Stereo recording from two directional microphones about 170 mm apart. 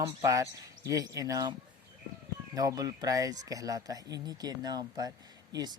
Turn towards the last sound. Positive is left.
turn(degrees=-25)  # may be behind; listen again after turning